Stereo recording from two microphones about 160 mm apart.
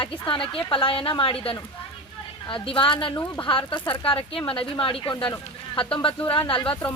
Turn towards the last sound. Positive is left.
turn(degrees=30)  # may be behind; listen again after turning